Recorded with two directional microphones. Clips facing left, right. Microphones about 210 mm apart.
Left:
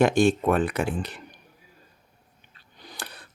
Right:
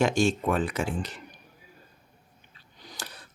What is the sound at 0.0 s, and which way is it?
Speech, 60° left (ahead or behind).